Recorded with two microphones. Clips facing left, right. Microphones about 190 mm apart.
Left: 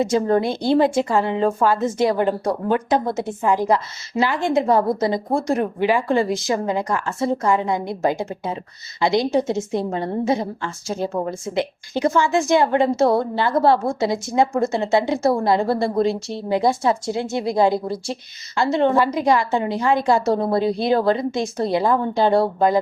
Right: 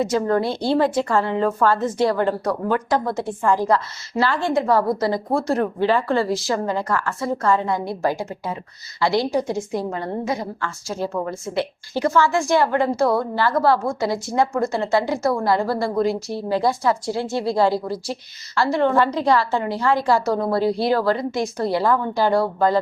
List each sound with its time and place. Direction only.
0.0 s a woman's voice: 20° left (ahead or behind)